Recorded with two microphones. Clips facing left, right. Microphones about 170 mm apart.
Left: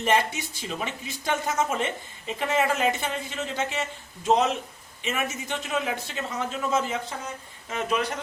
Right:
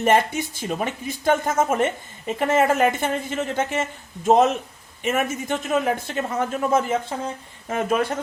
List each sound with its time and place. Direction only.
0.0 s speech: 50° right (ahead or behind)